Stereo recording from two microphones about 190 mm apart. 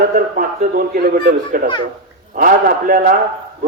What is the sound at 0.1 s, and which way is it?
Speech, 45° right (ahead or behind).